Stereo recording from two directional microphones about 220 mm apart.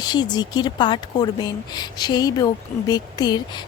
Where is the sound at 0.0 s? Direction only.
20° left (ahead or behind).